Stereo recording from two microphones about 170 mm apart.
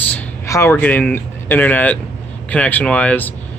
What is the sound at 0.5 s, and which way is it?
Speech, 15° left (ahead or behind).